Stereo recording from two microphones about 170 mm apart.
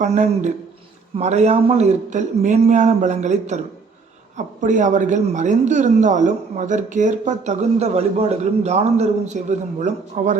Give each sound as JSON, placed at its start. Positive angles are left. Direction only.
{"t": 0.0, "sound": "a woman's voice", "side_deg": -45}